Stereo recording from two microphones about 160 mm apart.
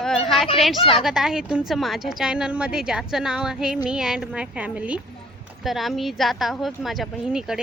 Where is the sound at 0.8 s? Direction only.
35° left (ahead or behind).